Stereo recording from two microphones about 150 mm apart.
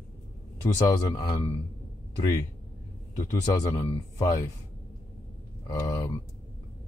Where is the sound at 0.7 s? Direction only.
25° left (ahead or behind).